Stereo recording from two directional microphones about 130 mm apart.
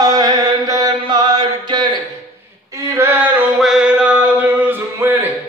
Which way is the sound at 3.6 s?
5° right (ahead or behind).